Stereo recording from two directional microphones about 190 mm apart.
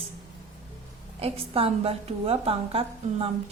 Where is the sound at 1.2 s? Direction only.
30° right (ahead or behind).